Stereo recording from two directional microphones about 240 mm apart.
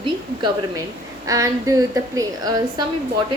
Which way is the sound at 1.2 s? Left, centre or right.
Centre.